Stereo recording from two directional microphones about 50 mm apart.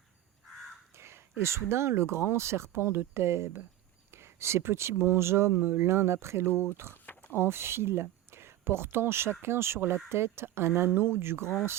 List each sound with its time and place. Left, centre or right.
0.9 s speech: right
5.5 s speech: right